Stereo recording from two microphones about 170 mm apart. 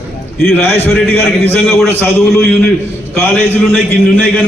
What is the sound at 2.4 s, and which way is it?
Speech, centre (ahead or behind).